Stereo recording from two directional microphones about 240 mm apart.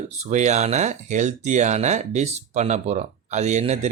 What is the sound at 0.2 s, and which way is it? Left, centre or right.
Speech, right.